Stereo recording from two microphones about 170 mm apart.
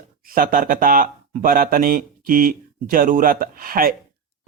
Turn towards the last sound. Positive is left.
turn(degrees=-60)  # may be behind; listen again after turning